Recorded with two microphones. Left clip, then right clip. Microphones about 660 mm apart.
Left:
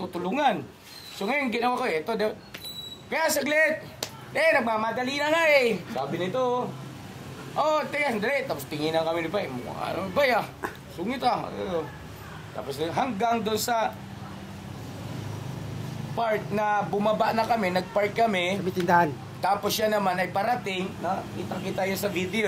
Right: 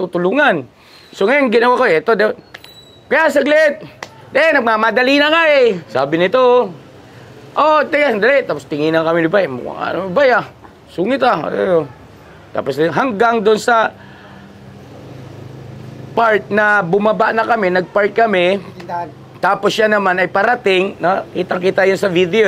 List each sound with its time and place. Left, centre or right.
0.1 s speech: right
16.2 s speech: right